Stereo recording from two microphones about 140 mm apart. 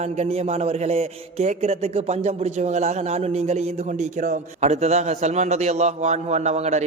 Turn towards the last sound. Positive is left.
turn(degrees=-55)  # may be behind; listen again after turning